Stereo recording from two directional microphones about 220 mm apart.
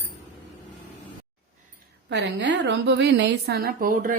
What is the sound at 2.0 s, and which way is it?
A woman's voice, 50° right (ahead or behind).